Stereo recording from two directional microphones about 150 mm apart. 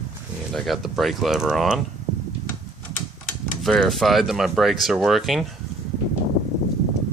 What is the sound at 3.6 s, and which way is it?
Speech, centre (ahead or behind).